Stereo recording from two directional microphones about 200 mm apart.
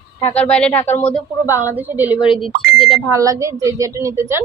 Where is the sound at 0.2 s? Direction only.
10° left (ahead or behind).